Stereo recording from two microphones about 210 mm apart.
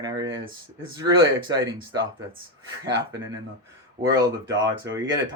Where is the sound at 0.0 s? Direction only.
20° right (ahead or behind).